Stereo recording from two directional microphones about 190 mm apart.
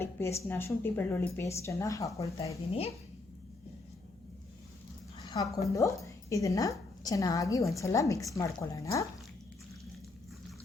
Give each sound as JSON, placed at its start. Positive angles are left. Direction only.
{"t": 0.0, "sound": "a woman's voice", "side_deg": 15}
{"t": 5.2, "sound": "a sound", "side_deg": 20}
{"t": 5.6, "sound": "a woman's voice", "side_deg": 15}